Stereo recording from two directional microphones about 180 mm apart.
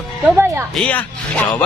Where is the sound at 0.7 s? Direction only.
5° left (ahead or behind).